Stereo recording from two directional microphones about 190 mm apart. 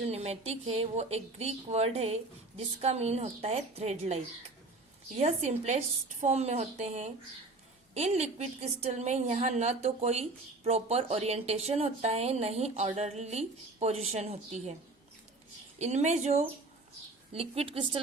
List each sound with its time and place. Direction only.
0.1 s a woman's voice: 35° right (ahead or behind)
15.8 s a woman's voice: 35° right (ahead or behind)